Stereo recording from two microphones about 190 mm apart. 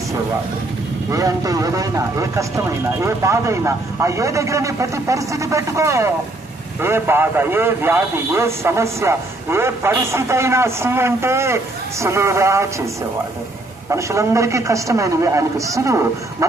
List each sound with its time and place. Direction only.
1.1 s a man's voice: 15° right (ahead or behind)
13.9 s a man's voice: 15° right (ahead or behind)